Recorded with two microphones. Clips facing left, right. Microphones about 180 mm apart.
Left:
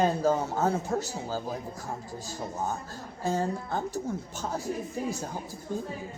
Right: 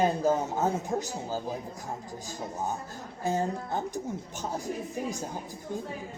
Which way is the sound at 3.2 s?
20° right (ahead or behind).